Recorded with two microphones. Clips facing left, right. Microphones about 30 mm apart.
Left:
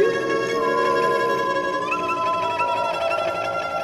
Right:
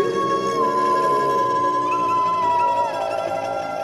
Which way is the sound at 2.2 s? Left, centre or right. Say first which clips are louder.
Right 3 dB; left.